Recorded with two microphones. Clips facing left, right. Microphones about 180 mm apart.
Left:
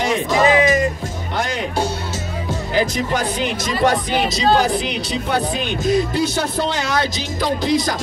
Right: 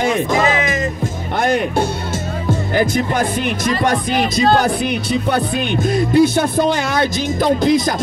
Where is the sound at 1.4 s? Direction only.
55° right (ahead or behind).